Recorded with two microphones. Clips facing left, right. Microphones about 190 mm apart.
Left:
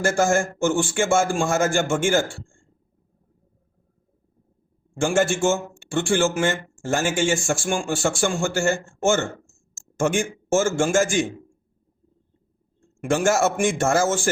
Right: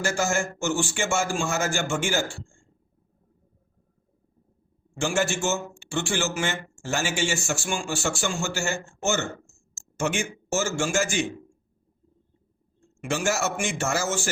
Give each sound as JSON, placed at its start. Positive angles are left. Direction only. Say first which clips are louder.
{"t": 0.0, "sound": "speech", "louder": "left 6 dB", "side_deg": 50}
{"t": 4.9, "sound": "speech", "louder": "left 5 dB", "side_deg": 50}
{"t": 13.0, "sound": "speech", "louder": "left 6 dB", "side_deg": 50}